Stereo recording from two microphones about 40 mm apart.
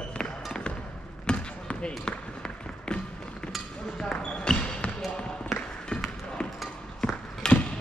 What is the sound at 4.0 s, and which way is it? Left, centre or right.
Basketball bounce, centre.